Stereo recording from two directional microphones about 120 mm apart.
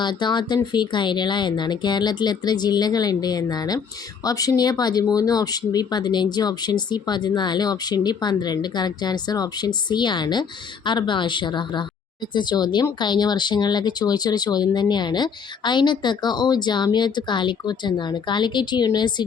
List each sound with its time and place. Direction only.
0.0 s speech: 40° left (ahead or behind)